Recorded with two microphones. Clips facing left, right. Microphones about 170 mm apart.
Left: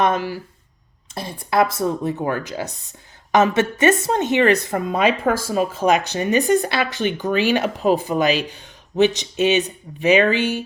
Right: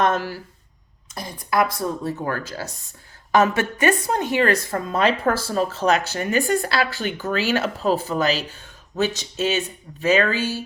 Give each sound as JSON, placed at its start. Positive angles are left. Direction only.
{"t": 0.0, "sound": "a woman's voice", "side_deg": 10}
{"t": 1.1, "sound": "a woman's voice", "side_deg": 25}